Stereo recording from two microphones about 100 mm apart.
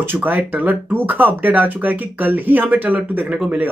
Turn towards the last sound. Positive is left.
turn(degrees=-15)  # may be behind; listen again after turning